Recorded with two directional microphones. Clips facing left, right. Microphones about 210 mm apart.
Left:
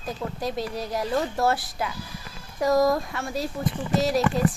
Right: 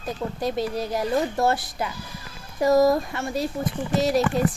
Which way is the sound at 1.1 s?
15° right (ahead or behind).